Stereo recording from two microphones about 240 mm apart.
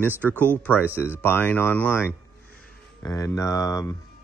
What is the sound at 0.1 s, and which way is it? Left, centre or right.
Speech, centre.